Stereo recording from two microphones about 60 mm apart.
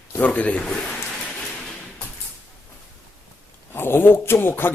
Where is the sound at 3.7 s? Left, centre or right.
Left.